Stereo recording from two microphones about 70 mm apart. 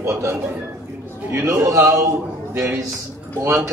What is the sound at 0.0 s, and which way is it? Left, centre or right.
A man's voice, right.